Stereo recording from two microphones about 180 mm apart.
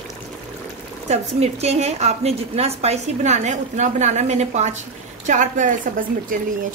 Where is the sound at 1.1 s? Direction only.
35° right (ahead or behind).